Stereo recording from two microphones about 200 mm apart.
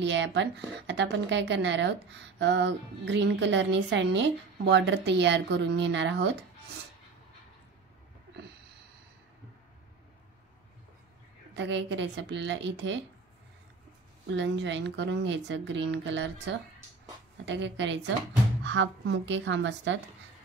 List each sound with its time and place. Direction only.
0.0 s a woman's voice: 65° right (ahead or behind)
11.5 s a woman's voice: 60° right (ahead or behind)
14.3 s a woman's voice: 65° right (ahead or behind)